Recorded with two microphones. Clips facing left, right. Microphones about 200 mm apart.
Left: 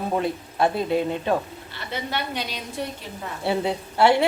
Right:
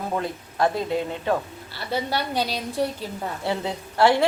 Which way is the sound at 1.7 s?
35° right (ahead or behind).